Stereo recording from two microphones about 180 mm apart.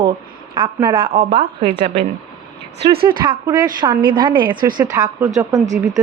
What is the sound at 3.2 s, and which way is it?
A woman's voice, 20° right (ahead or behind).